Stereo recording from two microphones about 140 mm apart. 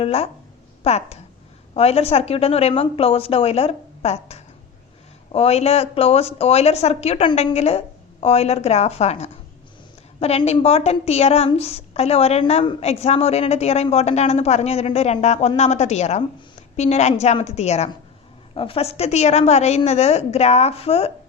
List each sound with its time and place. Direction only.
0.0 s speech: 45° left (ahead or behind)
18.5 s speech: 40° left (ahead or behind)